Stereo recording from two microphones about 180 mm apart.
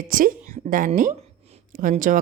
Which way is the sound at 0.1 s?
50° right (ahead or behind).